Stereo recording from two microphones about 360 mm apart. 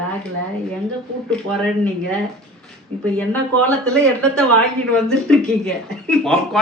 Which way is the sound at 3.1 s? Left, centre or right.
Centre.